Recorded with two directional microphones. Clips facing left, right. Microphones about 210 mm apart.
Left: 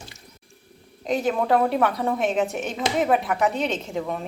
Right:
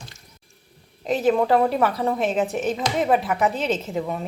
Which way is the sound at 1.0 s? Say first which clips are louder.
Right 3 dB; centre (ahead or behind).